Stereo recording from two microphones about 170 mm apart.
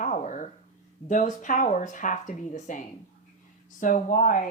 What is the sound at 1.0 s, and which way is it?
Speech, 50° left (ahead or behind).